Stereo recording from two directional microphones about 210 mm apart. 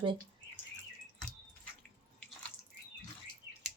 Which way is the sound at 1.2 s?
5° left (ahead or behind).